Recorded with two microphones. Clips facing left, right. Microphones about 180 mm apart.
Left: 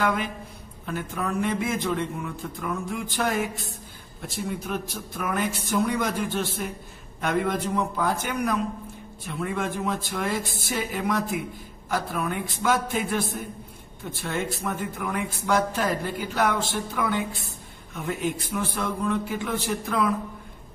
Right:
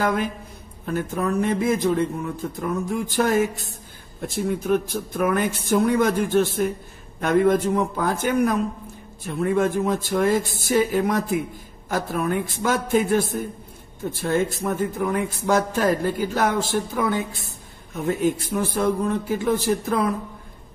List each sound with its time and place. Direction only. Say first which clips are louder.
0.0 s a man's voice: right 3 dB; 45° right (ahead or behind)
4.5 s a man's voice: right 10 dB; 50° right (ahead or behind)